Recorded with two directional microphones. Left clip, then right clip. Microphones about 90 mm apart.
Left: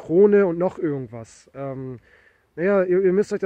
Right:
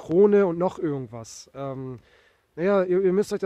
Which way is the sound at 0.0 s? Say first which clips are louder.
Left 3 dB; 35° right (ahead or behind).